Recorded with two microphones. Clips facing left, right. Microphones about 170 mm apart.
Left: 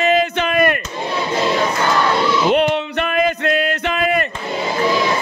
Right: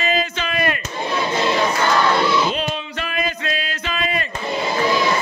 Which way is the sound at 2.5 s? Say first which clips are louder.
Left 9 dB; 65° left (ahead or behind).